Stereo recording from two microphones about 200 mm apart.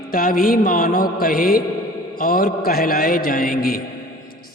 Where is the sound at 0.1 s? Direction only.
45° left (ahead or behind).